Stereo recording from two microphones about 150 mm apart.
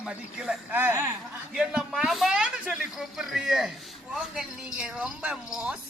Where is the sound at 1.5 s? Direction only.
5° right (ahead or behind).